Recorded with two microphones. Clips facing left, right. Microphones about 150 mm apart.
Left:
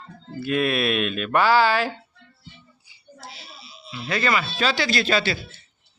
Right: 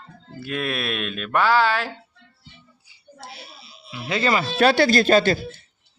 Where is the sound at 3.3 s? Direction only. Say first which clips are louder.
Right 1 dB; 55° right (ahead or behind).